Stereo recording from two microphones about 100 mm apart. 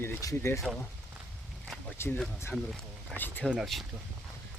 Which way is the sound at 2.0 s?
25° left (ahead or behind).